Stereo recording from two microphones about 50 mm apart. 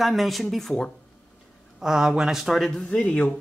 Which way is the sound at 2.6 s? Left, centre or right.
Centre.